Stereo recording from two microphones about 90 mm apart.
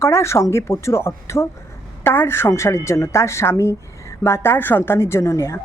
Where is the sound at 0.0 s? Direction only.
30° left (ahead or behind).